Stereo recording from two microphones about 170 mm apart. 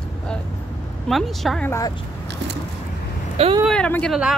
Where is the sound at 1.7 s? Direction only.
20° left (ahead or behind).